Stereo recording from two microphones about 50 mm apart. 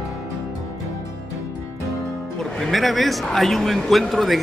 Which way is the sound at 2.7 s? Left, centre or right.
Centre.